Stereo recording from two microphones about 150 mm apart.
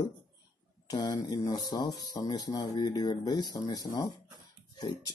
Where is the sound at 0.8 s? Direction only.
25° left (ahead or behind).